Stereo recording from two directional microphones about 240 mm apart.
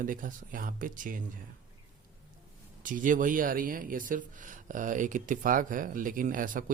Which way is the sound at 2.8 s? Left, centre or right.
Right.